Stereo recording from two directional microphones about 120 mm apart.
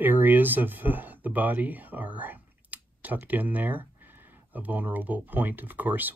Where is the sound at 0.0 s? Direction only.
15° right (ahead or behind).